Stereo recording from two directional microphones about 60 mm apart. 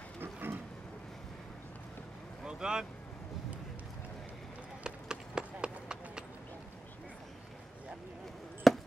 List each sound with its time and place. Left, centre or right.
0.2 s a sound: right
2.4 s vehicle: centre
4.8 s run: centre
8.6 s basketball bounce: centre